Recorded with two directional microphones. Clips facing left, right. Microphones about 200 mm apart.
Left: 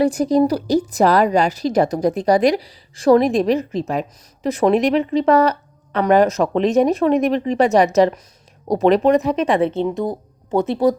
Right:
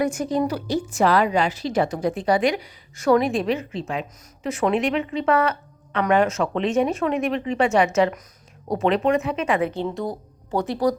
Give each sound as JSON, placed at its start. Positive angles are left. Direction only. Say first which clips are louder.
{"t": 0.0, "sound": "a woman's voice", "louder": "left 7 dB", "side_deg": 35}